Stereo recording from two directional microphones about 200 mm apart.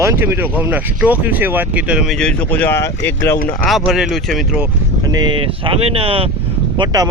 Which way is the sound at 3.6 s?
Centre (ahead or behind).